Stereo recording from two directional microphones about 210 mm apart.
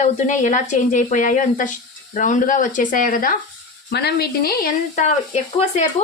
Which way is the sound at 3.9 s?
50° left (ahead or behind).